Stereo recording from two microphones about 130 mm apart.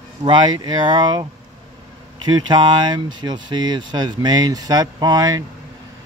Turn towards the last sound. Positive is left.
turn(degrees=-30)  # may be behind; listen again after turning